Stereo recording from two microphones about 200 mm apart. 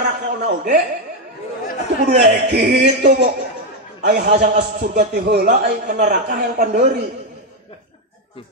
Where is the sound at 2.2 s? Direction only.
50° right (ahead or behind).